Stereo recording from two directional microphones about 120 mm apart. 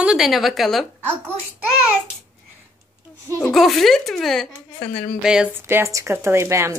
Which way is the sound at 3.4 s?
Centre (ahead or behind).